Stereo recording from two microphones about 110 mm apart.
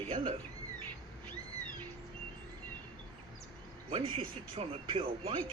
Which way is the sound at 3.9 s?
55° right (ahead or behind).